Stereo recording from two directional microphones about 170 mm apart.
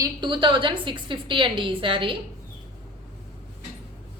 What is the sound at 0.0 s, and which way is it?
A woman's voice, 25° right (ahead or behind).